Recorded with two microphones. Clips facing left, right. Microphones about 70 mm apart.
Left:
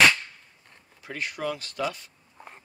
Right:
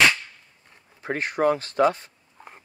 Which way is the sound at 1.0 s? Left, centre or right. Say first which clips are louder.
Right 9 dB; right.